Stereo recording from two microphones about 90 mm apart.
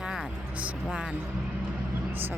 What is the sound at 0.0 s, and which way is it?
Vehicle, 10° right (ahead or behind).